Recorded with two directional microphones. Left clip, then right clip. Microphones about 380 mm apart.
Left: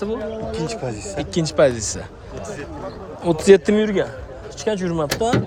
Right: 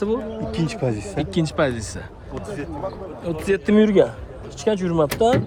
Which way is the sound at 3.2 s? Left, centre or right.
Centre.